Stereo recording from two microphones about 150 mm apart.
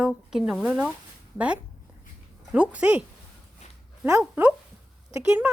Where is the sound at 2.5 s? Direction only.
10° right (ahead or behind).